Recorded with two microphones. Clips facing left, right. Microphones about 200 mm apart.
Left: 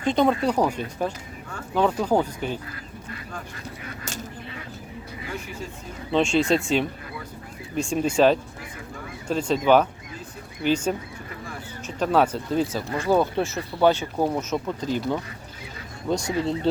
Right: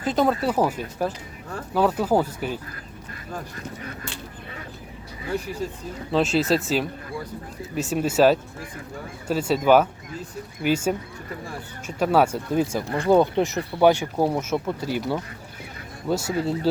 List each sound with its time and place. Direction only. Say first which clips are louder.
0.0 s speech: left 1 dB; 5° right (ahead or behind)
5.3 s speech: right 8 dB; 35° right (ahead or behind)
6.1 s speech: even; 5° right (ahead or behind)
10.6 s speech: even; 10° right (ahead or behind)